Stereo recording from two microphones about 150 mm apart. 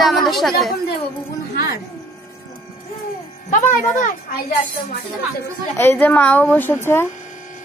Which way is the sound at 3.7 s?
60° left (ahead or behind).